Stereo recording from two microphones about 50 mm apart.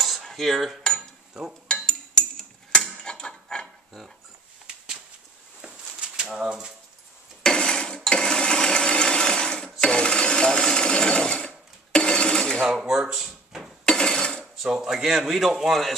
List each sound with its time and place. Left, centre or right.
0.0 s cutlery: centre
1.3 s dishes: centre
1.7 s dishes: centre
2.8 s a sound: centre
5.6 s a sound: centre
7.4 s a sound: centre
9.8 s sewing machine: centre
12.6 s speech: centre
13.8 s dishes: centre
14.6 s speech: centre